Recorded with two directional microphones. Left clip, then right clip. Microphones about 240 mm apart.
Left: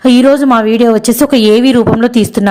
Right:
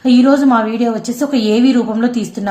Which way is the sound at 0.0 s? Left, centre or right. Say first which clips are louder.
Left 4 dB; left.